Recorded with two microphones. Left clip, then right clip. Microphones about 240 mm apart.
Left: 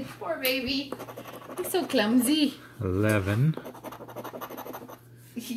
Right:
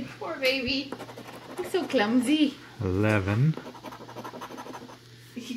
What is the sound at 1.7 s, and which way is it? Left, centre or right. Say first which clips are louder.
Speech: even; left.